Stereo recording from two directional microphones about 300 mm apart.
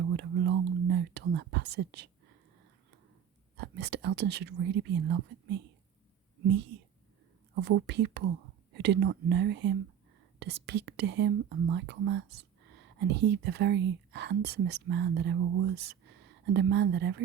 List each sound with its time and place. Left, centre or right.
0.1 s a sound: right
0.9 s whispering: right
3.6 s speech: right
7.5 s speech: right